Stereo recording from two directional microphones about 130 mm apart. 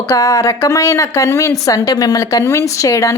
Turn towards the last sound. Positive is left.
turn(degrees=25)  # may be behind; listen again after turning